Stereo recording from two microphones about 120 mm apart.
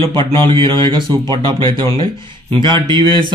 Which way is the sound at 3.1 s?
45° right (ahead or behind).